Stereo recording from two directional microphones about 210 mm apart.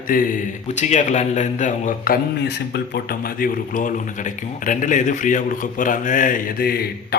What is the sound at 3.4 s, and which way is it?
Speech, 40° left (ahead or behind).